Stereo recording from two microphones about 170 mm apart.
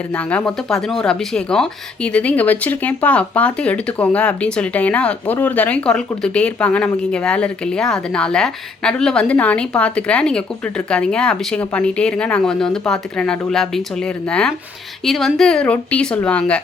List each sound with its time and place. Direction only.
0.1 s speech: 5° left (ahead or behind)